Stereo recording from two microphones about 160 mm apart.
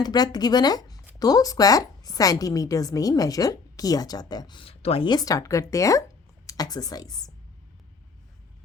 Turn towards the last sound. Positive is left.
turn(degrees=25)  # may be behind; listen again after turning